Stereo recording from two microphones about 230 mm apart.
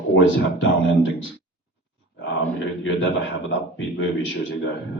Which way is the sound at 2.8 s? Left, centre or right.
Left.